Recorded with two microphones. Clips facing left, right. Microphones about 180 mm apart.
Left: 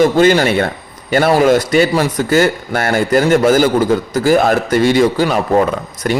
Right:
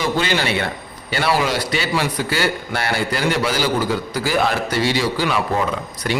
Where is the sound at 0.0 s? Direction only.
50° left (ahead or behind).